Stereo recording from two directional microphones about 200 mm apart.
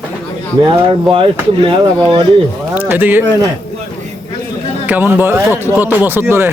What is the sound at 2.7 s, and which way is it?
Speech, 10° right (ahead or behind).